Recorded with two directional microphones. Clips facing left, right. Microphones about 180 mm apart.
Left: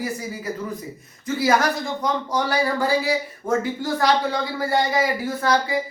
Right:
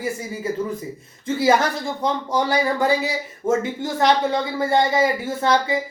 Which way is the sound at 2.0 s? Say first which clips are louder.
Right 5 dB; 25° right (ahead or behind).